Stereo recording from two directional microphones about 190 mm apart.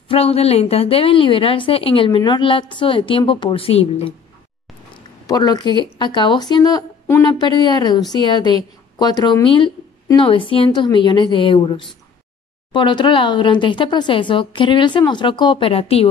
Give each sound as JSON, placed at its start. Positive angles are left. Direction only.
{"t": 0.1, "sound": "a woman's voice", "side_deg": 30}
{"t": 5.2, "sound": "a woman's voice", "side_deg": 20}